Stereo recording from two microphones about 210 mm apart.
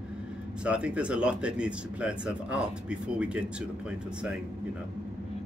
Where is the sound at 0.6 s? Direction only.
5° right (ahead or behind).